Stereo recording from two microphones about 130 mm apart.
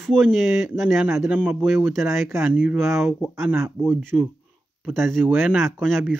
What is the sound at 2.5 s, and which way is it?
Speech, 10° right (ahead or behind).